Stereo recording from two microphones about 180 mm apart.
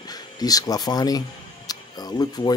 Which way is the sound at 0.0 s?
20° left (ahead or behind).